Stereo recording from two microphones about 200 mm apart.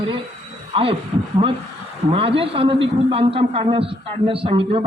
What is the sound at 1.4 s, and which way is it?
Speech, 30° right (ahead or behind).